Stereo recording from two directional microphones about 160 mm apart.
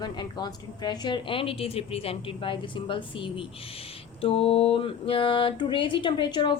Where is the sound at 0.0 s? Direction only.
25° left (ahead or behind).